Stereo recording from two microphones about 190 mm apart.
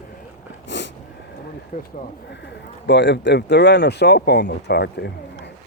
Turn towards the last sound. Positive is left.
turn(degrees=60)  # may be behind; listen again after turning